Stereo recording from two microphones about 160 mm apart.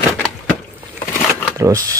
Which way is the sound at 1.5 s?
20° right (ahead or behind).